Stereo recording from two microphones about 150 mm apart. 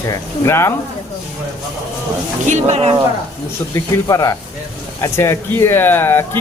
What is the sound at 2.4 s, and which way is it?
Speech, 50° right (ahead or behind).